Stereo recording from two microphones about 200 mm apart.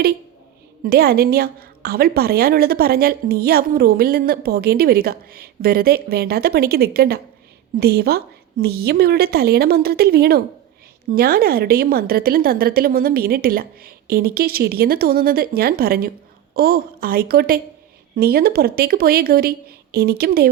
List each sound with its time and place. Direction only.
0.9 s a woman's voice: 50° right (ahead or behind)